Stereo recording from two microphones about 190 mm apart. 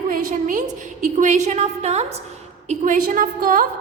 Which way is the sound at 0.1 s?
45° right (ahead or behind).